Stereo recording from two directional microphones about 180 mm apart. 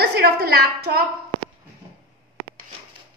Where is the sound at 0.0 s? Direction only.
60° right (ahead or behind).